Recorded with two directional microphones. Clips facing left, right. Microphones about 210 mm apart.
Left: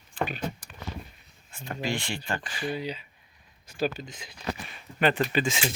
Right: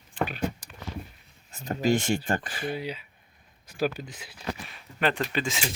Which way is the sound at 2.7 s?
10° right (ahead or behind).